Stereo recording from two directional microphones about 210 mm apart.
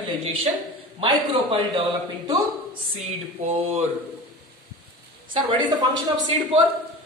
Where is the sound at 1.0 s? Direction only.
25° right (ahead or behind).